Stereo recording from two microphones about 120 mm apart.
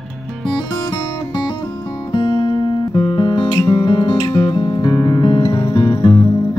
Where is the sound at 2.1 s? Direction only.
40° left (ahead or behind).